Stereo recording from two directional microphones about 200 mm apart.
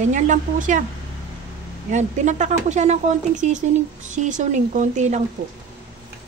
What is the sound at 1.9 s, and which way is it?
Speech, 35° right (ahead or behind).